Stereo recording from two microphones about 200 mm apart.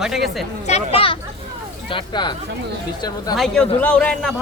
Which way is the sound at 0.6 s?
30° left (ahead or behind).